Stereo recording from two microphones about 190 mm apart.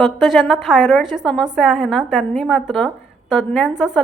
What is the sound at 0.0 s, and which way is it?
A woman's voice, centre (ahead or behind).